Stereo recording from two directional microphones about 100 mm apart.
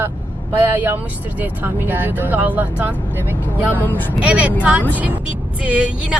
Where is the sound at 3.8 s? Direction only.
20° left (ahead or behind).